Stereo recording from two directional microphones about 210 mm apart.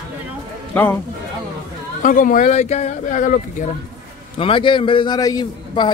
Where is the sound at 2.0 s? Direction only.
40° left (ahead or behind).